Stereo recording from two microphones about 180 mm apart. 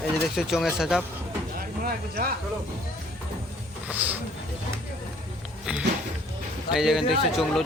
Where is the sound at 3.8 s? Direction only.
10° right (ahead or behind).